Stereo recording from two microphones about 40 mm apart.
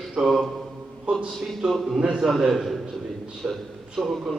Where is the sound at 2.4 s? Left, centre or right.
Centre.